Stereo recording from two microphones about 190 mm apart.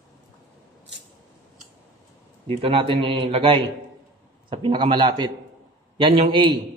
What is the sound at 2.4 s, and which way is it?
A man's voice, 30° right (ahead or behind).